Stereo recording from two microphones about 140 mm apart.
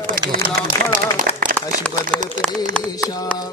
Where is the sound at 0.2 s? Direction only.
30° right (ahead or behind).